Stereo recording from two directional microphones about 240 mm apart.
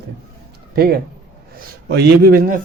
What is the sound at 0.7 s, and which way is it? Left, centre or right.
Speech, right.